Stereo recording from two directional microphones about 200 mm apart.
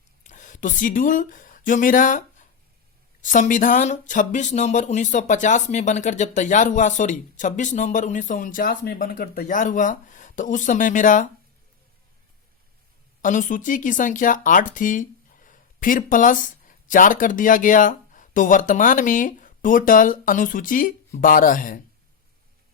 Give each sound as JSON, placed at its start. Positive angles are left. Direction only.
{"t": 0.3, "sound": "speech", "side_deg": 40}
{"t": 13.2, "sound": "speech", "side_deg": 40}